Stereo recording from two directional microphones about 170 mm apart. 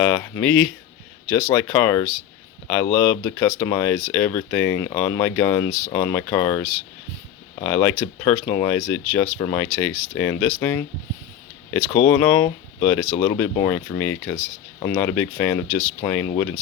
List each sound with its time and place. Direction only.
0.0 s speech: 15° left (ahead or behind)
11.9 s speech: 20° left (ahead or behind)